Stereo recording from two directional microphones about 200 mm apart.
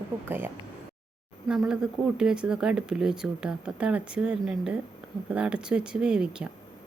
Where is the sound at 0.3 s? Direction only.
10° right (ahead or behind).